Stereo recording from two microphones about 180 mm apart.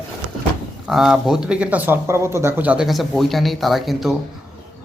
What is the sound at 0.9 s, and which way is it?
Speech, centre (ahead or behind).